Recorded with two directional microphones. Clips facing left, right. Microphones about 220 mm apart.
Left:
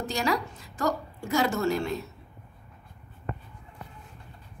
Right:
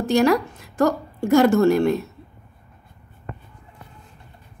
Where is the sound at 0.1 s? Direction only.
55° right (ahead or behind).